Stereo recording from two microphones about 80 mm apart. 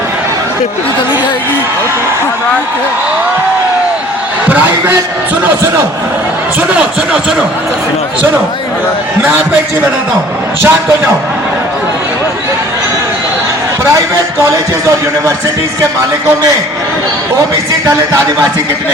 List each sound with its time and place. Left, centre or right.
4.4 s a man's voice: right
6.6 s speech: centre
10.6 s a man's voice: right